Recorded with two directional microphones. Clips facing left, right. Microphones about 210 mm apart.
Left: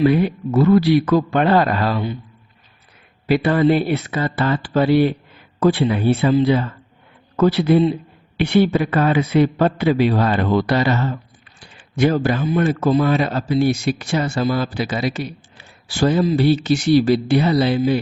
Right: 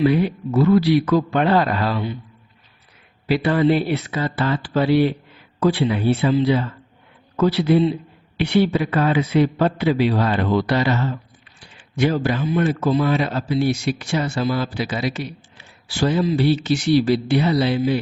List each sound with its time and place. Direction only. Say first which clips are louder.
0.0 s a man's voice: left 2 dB; 50° left (ahead or behind)
3.2 s a man's voice: left 2 dB; 50° left (ahead or behind)